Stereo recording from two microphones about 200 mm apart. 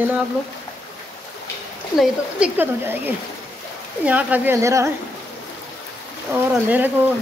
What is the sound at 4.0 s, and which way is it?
Speech, 10° right (ahead or behind).